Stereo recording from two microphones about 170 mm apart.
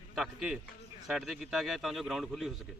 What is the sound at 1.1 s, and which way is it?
Speech, centre (ahead or behind).